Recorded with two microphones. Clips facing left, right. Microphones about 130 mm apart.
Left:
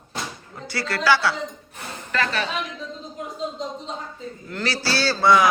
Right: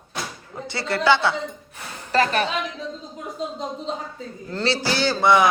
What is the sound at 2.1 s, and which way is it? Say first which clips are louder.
Speech: right 5 dB; 40° right (ahead or behind).